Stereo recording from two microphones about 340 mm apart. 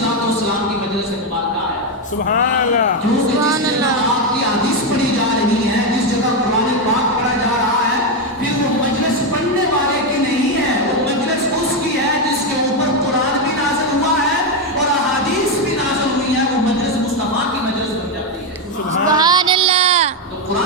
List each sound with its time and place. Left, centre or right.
19.1 s child singing: centre